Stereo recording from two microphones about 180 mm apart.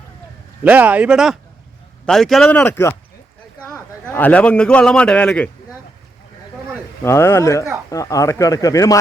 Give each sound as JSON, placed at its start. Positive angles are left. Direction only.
{"t": 0.6, "sound": "speech", "side_deg": -10}
{"t": 7.0, "sound": "speech", "side_deg": 15}